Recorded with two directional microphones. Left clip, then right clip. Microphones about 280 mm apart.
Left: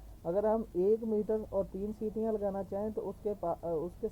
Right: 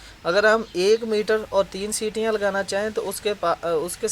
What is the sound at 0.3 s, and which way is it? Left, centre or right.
Speech, right.